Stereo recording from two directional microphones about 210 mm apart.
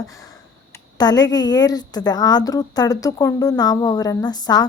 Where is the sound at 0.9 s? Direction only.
20° left (ahead or behind).